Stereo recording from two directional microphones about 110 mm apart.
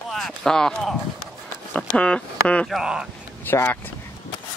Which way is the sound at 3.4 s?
20° left (ahead or behind).